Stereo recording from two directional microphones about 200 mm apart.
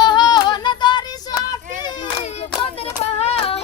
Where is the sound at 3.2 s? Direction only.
30° left (ahead or behind).